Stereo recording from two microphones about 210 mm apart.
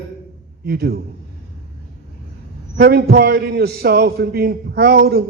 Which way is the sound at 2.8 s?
50° right (ahead or behind).